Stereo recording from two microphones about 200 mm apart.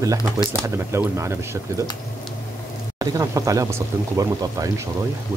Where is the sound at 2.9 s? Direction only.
15° right (ahead or behind).